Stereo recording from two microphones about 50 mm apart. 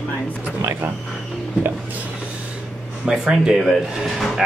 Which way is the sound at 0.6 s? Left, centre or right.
Right.